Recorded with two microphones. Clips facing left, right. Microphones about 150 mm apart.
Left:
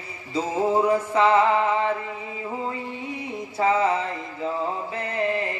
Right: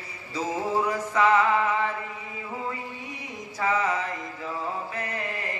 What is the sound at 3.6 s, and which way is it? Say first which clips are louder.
Music: left 5 dB; 30° left (ahead or behind).